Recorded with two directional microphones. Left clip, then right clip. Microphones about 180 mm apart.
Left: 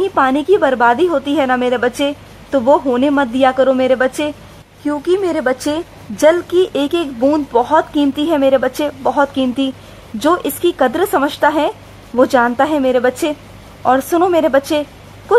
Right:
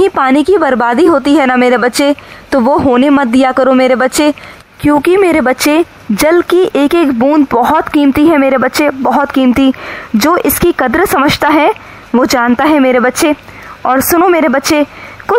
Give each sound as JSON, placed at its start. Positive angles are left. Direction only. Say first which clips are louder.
{"t": 0.0, "sound": "a woman's voice", "louder": "right 5 dB", "side_deg": -30}
{"t": 14.3, "sound": "a woman's voice", "louder": "right 3 dB", "side_deg": -25}